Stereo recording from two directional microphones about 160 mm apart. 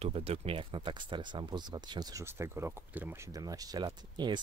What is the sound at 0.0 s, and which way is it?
Speech, 40° right (ahead or behind).